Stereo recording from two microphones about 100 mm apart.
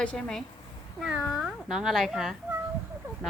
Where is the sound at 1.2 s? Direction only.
5° right (ahead or behind).